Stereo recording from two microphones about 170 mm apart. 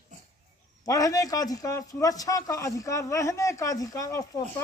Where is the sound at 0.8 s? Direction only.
20° left (ahead or behind).